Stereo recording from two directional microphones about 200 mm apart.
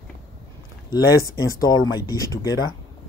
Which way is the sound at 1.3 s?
15° left (ahead or behind).